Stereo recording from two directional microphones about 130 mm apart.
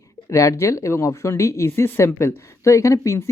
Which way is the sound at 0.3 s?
25° left (ahead or behind).